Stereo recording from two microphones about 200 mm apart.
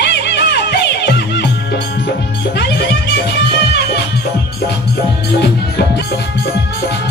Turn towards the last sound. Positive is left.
turn(degrees=55)  # may be behind; listen again after turning